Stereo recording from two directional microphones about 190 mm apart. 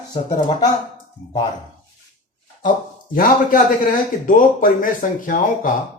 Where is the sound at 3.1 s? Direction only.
45° left (ahead or behind).